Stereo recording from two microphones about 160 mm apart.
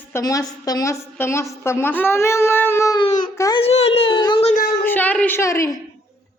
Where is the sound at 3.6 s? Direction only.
40° left (ahead or behind).